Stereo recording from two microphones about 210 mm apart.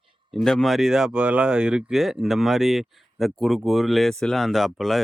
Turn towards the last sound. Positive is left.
turn(degrees=0)  # may be behind; listen again after turning